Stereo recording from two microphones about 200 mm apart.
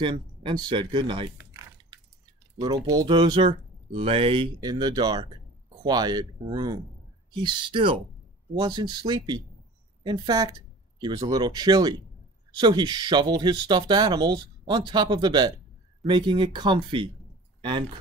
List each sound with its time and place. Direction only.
0.0 s speech: 25° right (ahead or behind)
2.6 s speech: 20° right (ahead or behind)